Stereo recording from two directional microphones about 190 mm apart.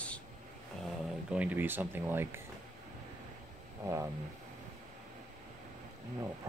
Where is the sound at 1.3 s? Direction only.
5° right (ahead or behind).